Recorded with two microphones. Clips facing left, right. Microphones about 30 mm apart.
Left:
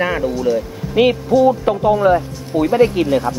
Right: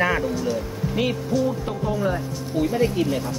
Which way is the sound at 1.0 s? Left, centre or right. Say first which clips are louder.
Left 11 dB; left.